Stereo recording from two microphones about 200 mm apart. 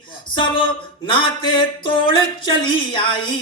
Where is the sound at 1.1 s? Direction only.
25° left (ahead or behind).